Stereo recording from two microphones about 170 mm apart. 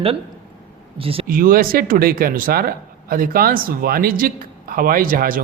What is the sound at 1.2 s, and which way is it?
Speech, 55° right (ahead or behind).